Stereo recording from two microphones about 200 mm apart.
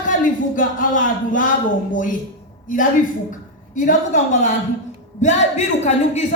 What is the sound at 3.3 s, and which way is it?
A man's voice, 40° left (ahead or behind).